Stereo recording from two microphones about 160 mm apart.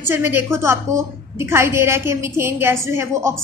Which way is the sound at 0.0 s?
15° right (ahead or behind).